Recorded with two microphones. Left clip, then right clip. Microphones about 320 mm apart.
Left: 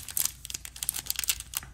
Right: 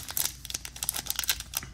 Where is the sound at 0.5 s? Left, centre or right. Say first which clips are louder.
Right 2 dB; centre.